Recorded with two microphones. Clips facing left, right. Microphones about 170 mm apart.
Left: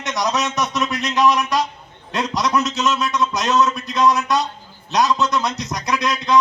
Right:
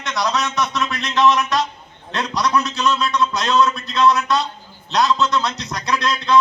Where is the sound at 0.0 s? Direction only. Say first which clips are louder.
Even; 20° left (ahead or behind).